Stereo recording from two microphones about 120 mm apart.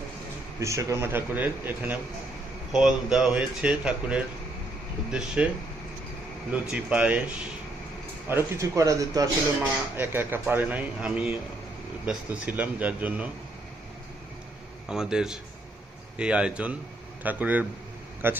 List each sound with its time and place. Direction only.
0.6 s a man's voice: 25° right (ahead or behind); by 5.5 s 5° right (ahead or behind)
6.5 s a man's voice: 10° right (ahead or behind)
8.3 s a man's voice: 20° right (ahead or behind)
14.8 s a man's voice: 5° right (ahead or behind)